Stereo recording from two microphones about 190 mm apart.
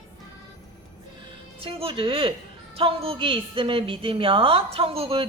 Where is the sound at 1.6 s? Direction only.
30° right (ahead or behind).